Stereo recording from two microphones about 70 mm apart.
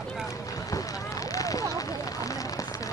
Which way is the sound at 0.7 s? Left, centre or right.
Left.